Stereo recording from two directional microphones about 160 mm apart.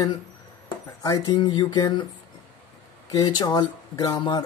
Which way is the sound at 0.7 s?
25° left (ahead or behind).